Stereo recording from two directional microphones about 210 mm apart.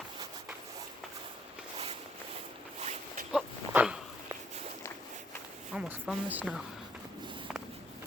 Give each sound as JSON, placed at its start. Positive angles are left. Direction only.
{"t": 2.8, "sound": "dog", "side_deg": -30}
{"t": 3.3, "sound": "dog", "side_deg": -5}
{"t": 5.7, "sound": "a woman's voice", "side_deg": -5}